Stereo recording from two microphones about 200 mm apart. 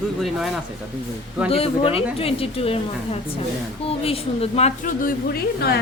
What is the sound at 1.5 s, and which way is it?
A woman's voice, 30° left (ahead or behind).